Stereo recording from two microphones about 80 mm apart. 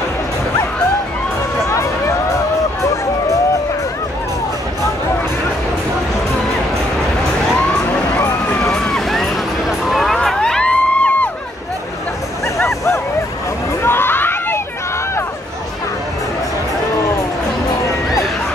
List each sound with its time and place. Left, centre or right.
1.7 s music: left
8.7 s vehicle: centre
13.8 s a sound: left